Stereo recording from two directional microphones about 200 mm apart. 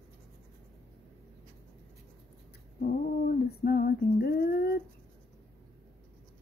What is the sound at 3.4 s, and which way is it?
Female singing, 50° left (ahead or behind).